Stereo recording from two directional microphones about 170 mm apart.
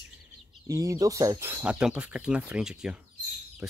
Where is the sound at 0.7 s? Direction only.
20° right (ahead or behind).